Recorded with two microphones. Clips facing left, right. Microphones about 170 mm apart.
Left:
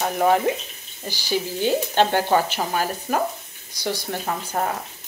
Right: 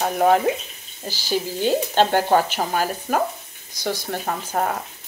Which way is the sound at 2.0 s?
45° right (ahead or behind).